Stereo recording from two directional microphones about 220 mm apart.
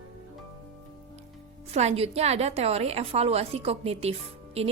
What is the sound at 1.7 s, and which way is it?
A woman's voice, 30° right (ahead or behind).